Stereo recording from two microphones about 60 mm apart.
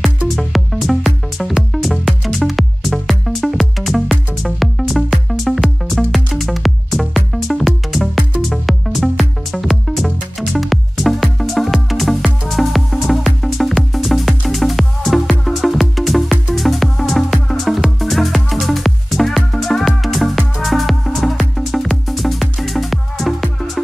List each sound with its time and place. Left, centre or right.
0.0 s music: centre